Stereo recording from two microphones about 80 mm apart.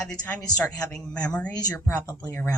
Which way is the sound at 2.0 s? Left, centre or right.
Right.